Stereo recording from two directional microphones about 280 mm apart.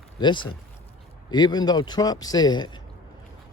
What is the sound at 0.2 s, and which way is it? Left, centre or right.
Speech, centre.